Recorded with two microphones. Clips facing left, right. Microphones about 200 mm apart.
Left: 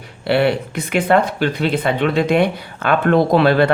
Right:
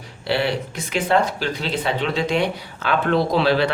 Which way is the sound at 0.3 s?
60° left (ahead or behind).